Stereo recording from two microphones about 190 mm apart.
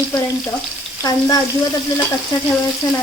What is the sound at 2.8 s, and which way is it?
Frying, 20° left (ahead or behind).